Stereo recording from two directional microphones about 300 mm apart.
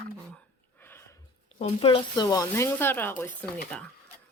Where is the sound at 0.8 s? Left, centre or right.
Centre.